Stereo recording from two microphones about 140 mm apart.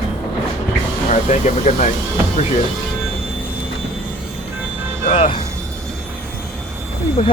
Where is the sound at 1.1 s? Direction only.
60° left (ahead or behind).